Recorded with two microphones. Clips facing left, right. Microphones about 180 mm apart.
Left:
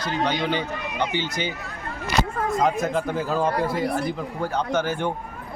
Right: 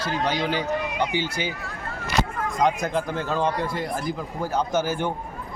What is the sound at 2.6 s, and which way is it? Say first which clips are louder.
A man's voice: right 1 dB; 5° left (ahead or behind).